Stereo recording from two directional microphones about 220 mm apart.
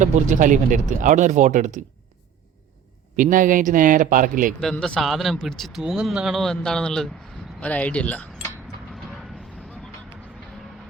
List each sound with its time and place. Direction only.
0.0 s speech: 35° right (ahead or behind)
3.2 s speech: 35° right (ahead or behind)
4.6 s speech: 5° left (ahead or behind)